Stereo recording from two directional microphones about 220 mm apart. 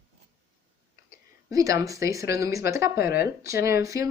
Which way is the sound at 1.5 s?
15° right (ahead or behind).